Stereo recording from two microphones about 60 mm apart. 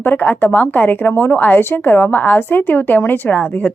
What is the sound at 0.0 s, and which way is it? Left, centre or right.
A woman's voice, left.